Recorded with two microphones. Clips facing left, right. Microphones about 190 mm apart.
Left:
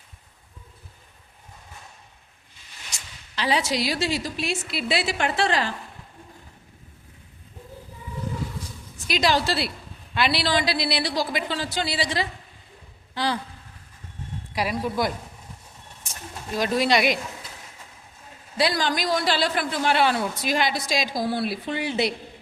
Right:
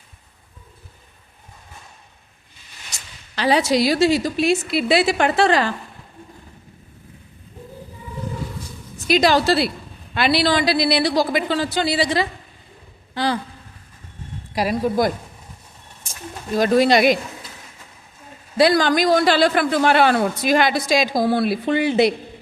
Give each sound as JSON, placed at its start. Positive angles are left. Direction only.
{"t": 3.3, "sound": "a woman's voice", "side_deg": -55}
{"t": 9.0, "sound": "a woman's voice", "side_deg": -50}
{"t": 14.5, "sound": "a woman's voice", "side_deg": -45}
{"t": 16.6, "sound": "a woman's voice", "side_deg": -50}
{"t": 18.5, "sound": "a man's voice", "side_deg": -50}